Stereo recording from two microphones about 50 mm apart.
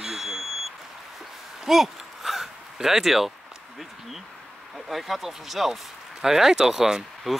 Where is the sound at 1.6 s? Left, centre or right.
Centre.